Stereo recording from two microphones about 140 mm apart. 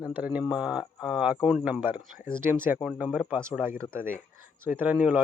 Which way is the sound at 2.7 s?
Centre (ahead or behind).